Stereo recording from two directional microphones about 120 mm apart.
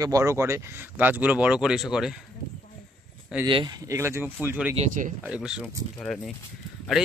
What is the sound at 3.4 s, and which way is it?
Speech, 40° right (ahead or behind).